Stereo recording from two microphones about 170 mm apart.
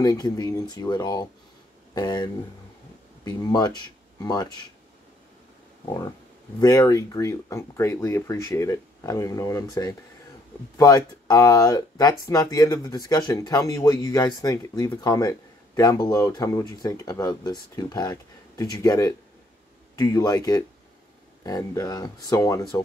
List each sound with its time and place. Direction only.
0.0 s speech: 20° left (ahead or behind)
3.3 s speech: 20° left (ahead or behind)
5.9 s speech: 25° left (ahead or behind)